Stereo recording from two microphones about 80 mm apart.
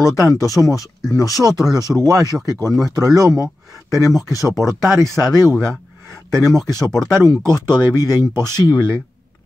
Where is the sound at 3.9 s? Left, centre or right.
Left.